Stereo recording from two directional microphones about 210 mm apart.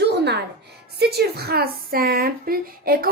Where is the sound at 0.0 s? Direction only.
50° right (ahead or behind).